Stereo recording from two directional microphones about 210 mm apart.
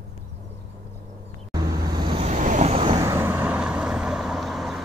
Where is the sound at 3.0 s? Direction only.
15° right (ahead or behind).